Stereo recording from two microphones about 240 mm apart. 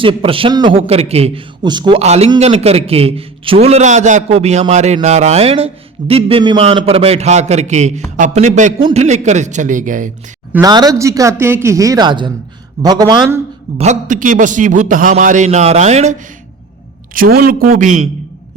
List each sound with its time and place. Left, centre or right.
0.0 s a man's voice: right
10.5 s speech: centre
13.8 s a man's voice: right
17.2 s a man's voice: right